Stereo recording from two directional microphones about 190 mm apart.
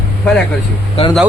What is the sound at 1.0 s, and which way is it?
Speech, 30° left (ahead or behind).